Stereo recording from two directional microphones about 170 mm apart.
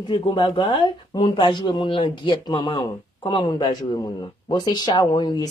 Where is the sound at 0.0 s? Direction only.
25° left (ahead or behind).